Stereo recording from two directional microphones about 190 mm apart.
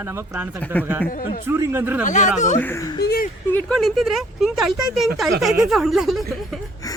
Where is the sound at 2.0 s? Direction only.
40° left (ahead or behind).